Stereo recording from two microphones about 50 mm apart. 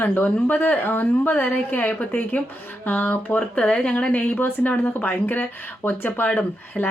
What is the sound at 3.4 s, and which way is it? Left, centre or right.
Speech, left.